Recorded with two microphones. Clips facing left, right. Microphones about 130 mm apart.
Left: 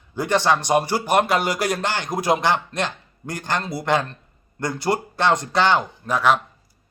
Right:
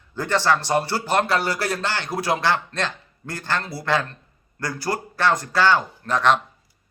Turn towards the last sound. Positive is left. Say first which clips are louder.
# even
turn(degrees=10)  # may be behind; listen again after turning